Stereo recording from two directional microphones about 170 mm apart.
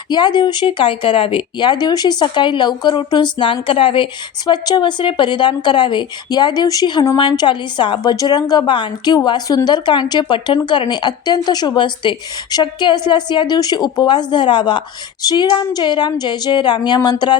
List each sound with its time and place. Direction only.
0.1 s speech: 25° left (ahead or behind)